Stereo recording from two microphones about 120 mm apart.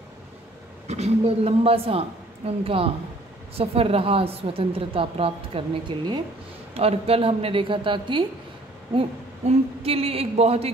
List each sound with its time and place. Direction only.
0.8 s a woman's voice: 65° right (ahead or behind); by 6.2 s 40° right (ahead or behind)
6.7 s a woman's voice: 55° right (ahead or behind)
9.5 s a woman's voice: 55° right (ahead or behind)